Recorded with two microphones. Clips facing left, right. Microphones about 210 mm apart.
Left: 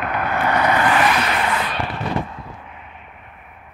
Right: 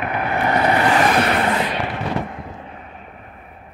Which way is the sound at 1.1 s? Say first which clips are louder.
Right 4 dB; 45° right (ahead or behind).